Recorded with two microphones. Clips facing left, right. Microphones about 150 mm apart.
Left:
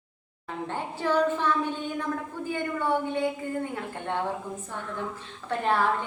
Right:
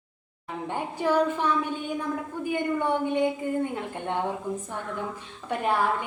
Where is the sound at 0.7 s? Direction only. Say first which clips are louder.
Right 2 dB; 15° right (ahead or behind).